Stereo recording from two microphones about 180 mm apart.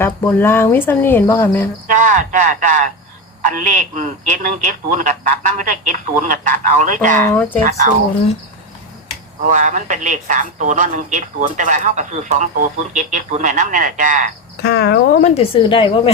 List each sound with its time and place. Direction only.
0.0 s speech: 10° left (ahead or behind)
1.9 s speech: 45° right (ahead or behind)
9.5 s speech: 45° right (ahead or behind)
14.6 s speech: 65° left (ahead or behind)
15.2 s a woman's voice: 30° left (ahead or behind)